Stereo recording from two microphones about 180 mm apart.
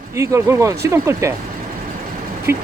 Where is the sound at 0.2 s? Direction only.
15° right (ahead or behind).